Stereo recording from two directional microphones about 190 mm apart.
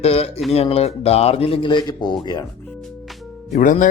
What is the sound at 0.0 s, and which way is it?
Speech, 30° left (ahead or behind).